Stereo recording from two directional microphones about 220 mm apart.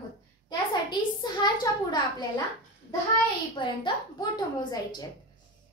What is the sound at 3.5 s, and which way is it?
A woman's voice, 20° left (ahead or behind).